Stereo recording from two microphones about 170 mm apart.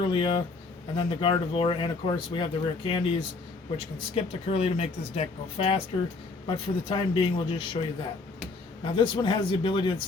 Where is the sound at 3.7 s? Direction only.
35° left (ahead or behind).